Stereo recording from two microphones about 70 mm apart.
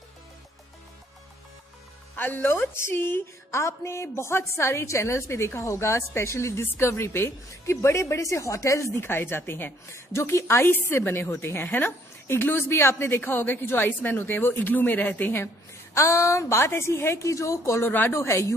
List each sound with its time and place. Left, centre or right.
2.1 s a woman's voice: left
15.4 s a woman's voice: left